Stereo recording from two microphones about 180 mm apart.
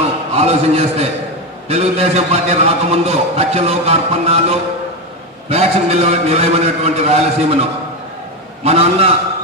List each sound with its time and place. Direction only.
0.3 s a man's voice: 35° right (ahead or behind)
8.6 s a man's voice: 35° right (ahead or behind)